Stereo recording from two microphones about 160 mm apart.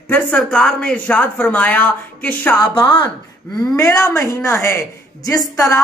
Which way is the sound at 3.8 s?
20° left (ahead or behind).